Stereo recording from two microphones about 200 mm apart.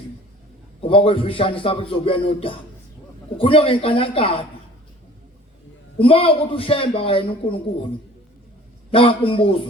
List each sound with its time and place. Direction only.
0.8 s a man's voice: 25° left (ahead or behind)
6.0 s a man's voice: 30° left (ahead or behind)
8.9 s a man's voice: 25° left (ahead or behind)